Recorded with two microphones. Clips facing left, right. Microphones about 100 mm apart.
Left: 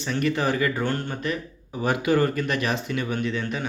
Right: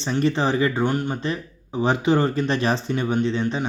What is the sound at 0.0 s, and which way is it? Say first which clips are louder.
Speech: right 3 dB; 30° right (ahead or behind).